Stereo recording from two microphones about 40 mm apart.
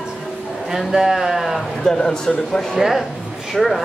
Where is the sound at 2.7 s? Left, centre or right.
Centre.